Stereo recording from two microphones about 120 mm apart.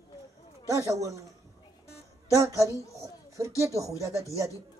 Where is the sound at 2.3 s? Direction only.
25° right (ahead or behind).